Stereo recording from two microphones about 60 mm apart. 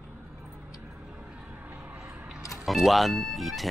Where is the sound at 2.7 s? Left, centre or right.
Centre.